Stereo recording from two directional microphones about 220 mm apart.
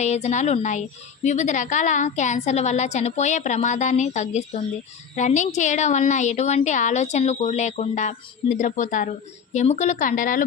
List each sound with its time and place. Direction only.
0.0 s a woman's voice: 30° left (ahead or behind)